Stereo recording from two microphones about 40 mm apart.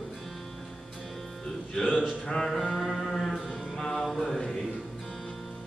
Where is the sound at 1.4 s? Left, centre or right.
Centre.